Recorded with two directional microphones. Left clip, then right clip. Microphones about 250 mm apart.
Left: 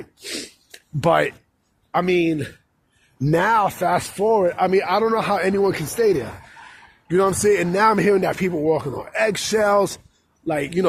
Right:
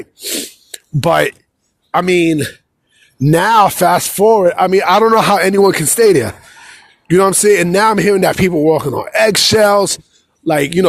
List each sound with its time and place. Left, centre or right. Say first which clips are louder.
0.0 s gasp: right 9 dB; right
1.9 s speech: right 7 dB; right